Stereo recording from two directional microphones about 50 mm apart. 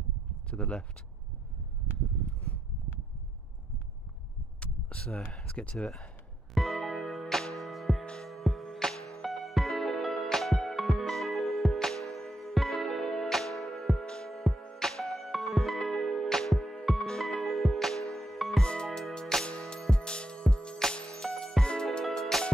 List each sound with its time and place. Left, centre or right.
0.5 s speech: left
4.6 s a sound: left
5.5 s speech: left
6.5 s music: centre
8.0 s music: centre
8.3 s music: centre
14.0 s music: centre
14.3 s music: centre
17.3 s music: centre
18.6 s music: centre
22.1 s music: centre